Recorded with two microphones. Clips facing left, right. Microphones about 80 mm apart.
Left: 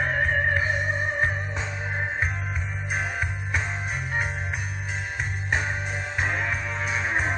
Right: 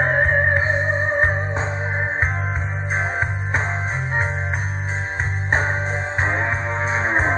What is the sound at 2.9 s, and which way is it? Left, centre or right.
Music, right.